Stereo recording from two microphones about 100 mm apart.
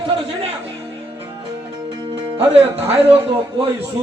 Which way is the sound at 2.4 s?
85° right.